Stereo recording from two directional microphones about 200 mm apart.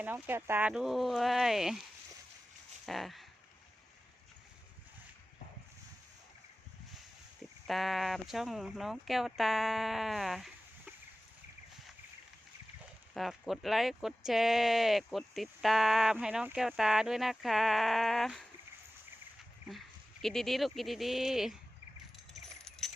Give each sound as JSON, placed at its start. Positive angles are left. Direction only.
{"t": 0.0, "sound": "speech", "side_deg": -10}
{"t": 2.8, "sound": "a sound", "side_deg": 0}
{"t": 7.7, "sound": "speech", "side_deg": 0}
{"t": 13.1, "sound": "speech", "side_deg": 0}
{"t": 20.2, "sound": "speech", "side_deg": 0}
{"t": 22.3, "sound": "a sound", "side_deg": 0}